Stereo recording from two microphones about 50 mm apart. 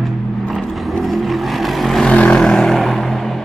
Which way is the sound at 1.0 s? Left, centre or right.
Centre.